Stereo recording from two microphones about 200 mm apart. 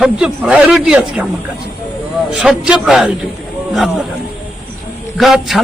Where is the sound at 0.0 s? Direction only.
5° right (ahead or behind).